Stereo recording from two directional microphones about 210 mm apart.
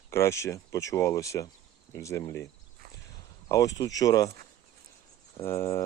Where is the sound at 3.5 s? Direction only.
15° left (ahead or behind).